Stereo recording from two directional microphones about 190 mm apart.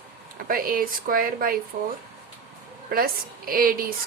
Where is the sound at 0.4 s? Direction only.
50° right (ahead or behind).